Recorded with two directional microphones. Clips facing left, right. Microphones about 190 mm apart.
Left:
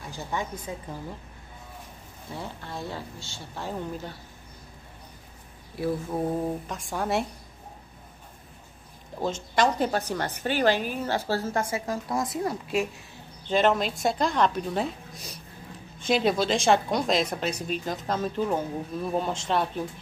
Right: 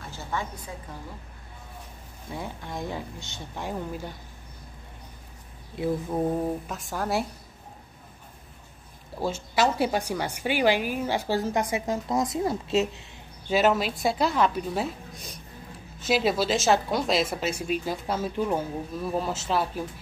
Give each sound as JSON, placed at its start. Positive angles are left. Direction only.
{"t": 0.0, "sound": "a sound", "side_deg": 15}
{"t": 2.3, "sound": "a woman's voice", "side_deg": -15}
{"t": 5.8, "sound": "a woman's voice", "side_deg": -15}
{"t": 6.7, "sound": "a woman's voice", "side_deg": 0}
{"t": 9.2, "sound": "a woman's voice", "side_deg": -5}
{"t": 13.5, "sound": "a woman's voice", "side_deg": -5}